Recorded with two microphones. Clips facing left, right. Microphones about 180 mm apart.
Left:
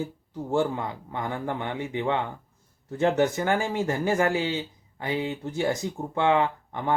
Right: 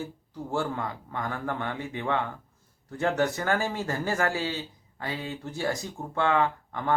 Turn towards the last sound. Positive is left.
turn(degrees=20)  # may be behind; listen again after turning